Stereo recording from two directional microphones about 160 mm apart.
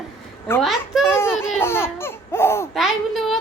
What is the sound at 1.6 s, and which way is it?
Laughter, 15° left (ahead or behind).